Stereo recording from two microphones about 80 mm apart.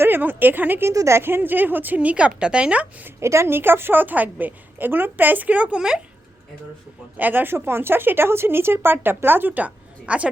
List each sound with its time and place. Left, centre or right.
0.0 s speech: right
0.9 s speech: right; by 3.1 s centre
3.2 s speech: right; by 6.0 s centre
7.2 s speech: right